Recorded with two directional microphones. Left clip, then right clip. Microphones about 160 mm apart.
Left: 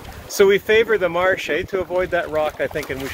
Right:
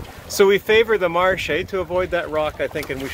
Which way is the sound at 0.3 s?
25° right (ahead or behind).